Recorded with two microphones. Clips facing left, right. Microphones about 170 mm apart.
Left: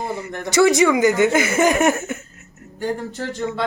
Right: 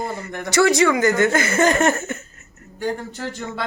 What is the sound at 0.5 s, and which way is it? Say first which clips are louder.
Speech: left 2 dB; 20° left (ahead or behind).